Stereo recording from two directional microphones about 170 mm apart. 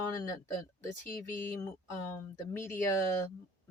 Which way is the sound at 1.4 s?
15° left (ahead or behind).